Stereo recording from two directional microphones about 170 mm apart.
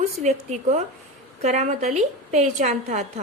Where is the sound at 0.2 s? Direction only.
40° right (ahead or behind).